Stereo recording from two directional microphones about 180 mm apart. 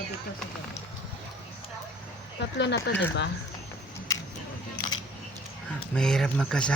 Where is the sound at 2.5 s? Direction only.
70° left (ahead or behind).